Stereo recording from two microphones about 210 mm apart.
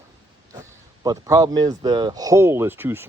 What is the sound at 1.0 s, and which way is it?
Speech, 15° right (ahead or behind).